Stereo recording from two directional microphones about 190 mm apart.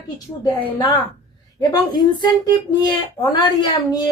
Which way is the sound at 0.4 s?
20° left (ahead or behind).